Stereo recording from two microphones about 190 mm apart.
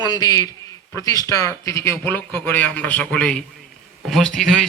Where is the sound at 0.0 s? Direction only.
20° left (ahead or behind).